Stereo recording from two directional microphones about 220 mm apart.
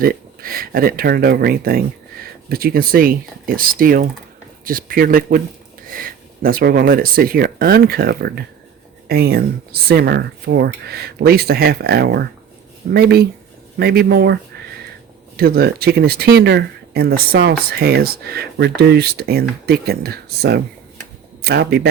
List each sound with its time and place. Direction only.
0.0 s speech: 40° right (ahead or behind)
15.4 s speech: 45° right (ahead or behind)